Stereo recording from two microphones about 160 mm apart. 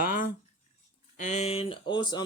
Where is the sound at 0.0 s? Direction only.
60° left (ahead or behind).